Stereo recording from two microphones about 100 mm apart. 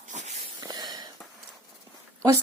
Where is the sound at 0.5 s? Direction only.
45° right (ahead or behind).